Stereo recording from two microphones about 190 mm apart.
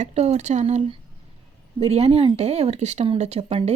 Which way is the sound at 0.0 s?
35° right (ahead or behind).